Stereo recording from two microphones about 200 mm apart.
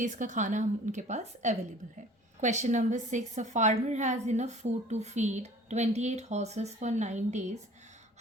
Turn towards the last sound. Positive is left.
turn(degrees=-35)  # may be behind; listen again after turning